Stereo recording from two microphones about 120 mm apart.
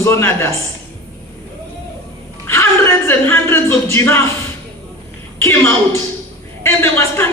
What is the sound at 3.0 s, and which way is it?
A man's voice, 20° left (ahead or behind).